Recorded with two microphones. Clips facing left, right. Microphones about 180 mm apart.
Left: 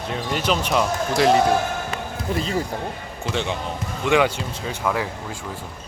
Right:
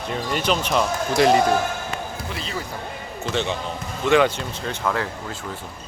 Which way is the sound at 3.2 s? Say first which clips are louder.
Even; 10° left (ahead or behind).